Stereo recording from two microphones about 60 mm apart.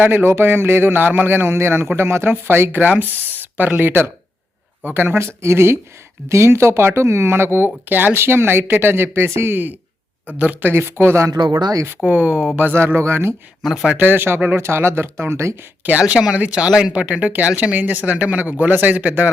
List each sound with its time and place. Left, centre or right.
0.0 s speech: right
12.0 s speech: right
12.7 s speech: right
13.6 s speech: centre
13.9 s speech: right
15.8 s speech: right
16.6 s speech: centre
16.9 s speech: right